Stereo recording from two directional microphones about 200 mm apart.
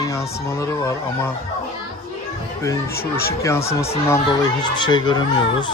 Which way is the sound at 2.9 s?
50° left (ahead or behind).